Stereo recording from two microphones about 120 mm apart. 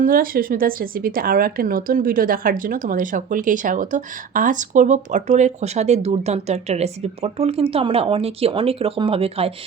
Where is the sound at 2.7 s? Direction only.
90° right.